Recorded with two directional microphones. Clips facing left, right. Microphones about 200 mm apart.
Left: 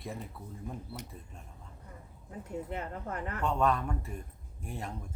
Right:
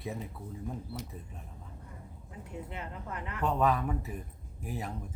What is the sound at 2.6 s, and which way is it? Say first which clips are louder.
Speech: left 4 dB; 45° left (ahead or behind).